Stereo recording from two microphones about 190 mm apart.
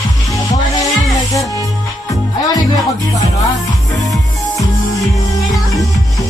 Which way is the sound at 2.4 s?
20° left (ahead or behind).